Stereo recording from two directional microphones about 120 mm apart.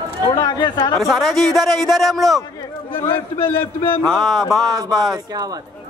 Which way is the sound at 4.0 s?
5° left (ahead or behind).